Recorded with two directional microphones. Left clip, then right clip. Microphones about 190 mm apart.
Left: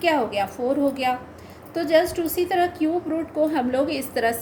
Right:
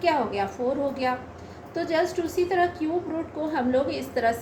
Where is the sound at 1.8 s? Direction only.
55° left (ahead or behind).